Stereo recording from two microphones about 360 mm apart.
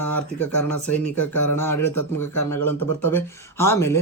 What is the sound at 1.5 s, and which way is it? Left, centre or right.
Speech, centre.